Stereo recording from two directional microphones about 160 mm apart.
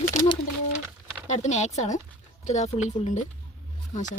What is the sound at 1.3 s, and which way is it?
A woman's voice, 45° left (ahead or behind).